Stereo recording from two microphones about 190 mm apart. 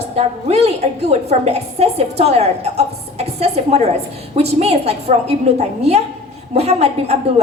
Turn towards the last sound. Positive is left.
turn(degrees=-35)  # may be behind; listen again after turning